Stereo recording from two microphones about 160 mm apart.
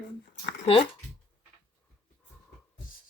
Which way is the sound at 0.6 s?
35° left (ahead or behind).